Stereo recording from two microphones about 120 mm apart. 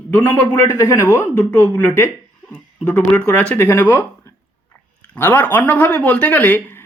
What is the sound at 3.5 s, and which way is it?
A woman's voice, 15° left (ahead or behind).